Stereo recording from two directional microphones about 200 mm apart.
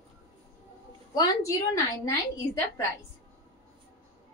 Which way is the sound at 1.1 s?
20° left (ahead or behind).